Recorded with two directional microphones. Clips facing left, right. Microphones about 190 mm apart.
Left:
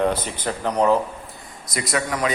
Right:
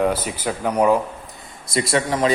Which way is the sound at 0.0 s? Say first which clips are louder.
Right 1 dB; 10° right (ahead or behind).